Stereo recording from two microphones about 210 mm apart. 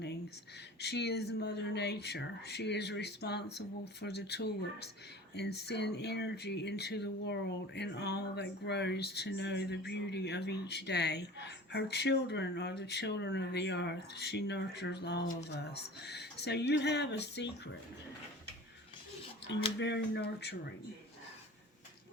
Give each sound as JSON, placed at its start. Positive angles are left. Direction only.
{"t": 0.8, "sound": "speech", "side_deg": 50}
{"t": 19.8, "sound": "speech", "side_deg": 55}